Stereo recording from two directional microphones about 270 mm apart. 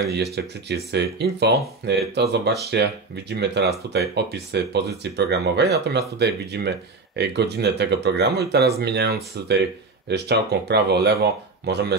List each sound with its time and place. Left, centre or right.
0.1 s speech: right